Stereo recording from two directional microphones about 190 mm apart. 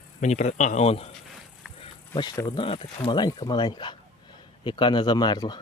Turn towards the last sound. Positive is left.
turn(degrees=25)  # may be behind; listen again after turning